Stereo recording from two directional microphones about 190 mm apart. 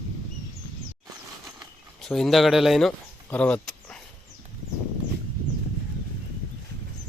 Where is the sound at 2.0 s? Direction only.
Centre (ahead or behind).